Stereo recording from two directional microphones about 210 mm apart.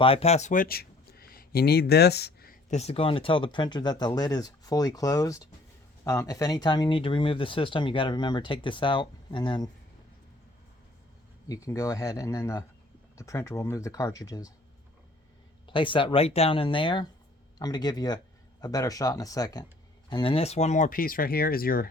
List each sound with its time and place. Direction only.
0.0 s speech: 30° left (ahead or behind)
11.4 s speech: 15° left (ahead or behind)
15.6 s speech: 25° left (ahead or behind); by 21.8 s 45° left (ahead or behind)